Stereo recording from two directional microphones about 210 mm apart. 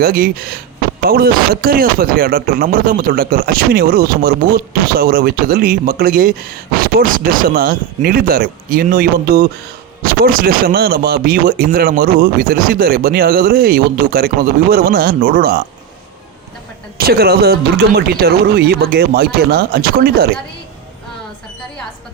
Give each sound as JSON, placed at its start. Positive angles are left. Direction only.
{"t": 0.0, "sound": "speech", "side_deg": -45}
{"t": 17.0, "sound": "speech", "side_deg": -45}